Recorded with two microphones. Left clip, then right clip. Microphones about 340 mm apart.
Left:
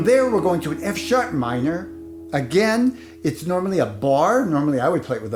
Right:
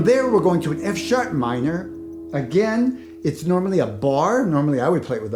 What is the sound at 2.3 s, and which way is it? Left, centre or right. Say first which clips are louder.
Speech: left 2 dB; left.